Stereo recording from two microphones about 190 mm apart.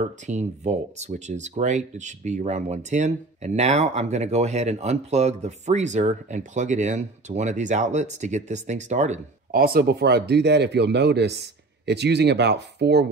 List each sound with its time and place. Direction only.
0.3 s speech: 35° right (ahead or behind); by 13.0 s 60° right (ahead or behind)